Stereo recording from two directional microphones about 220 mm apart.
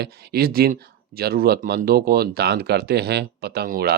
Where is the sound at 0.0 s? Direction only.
45° right (ahead or behind).